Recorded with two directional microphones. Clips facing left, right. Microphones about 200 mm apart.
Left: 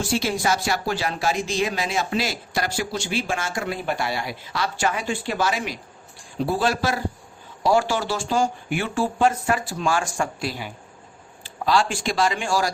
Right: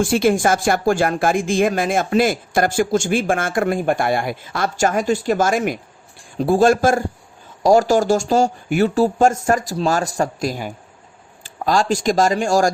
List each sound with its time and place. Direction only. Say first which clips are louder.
0.0 s speech: right 8 dB; 55° right (ahead or behind)